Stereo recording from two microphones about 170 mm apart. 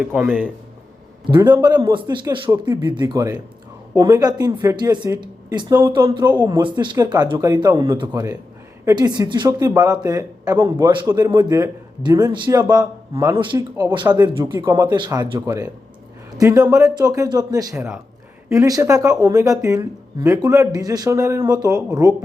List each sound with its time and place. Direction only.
0.0 s a man's voice: 10° right (ahead or behind)
1.6 s speech: 25° right (ahead or behind)